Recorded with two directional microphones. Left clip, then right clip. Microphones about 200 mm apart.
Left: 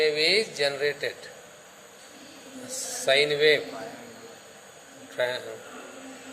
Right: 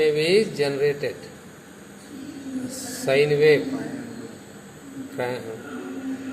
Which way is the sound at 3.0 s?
35° left (ahead or behind).